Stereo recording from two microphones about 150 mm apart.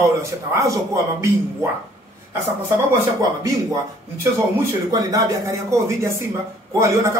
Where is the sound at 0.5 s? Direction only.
20° right (ahead or behind).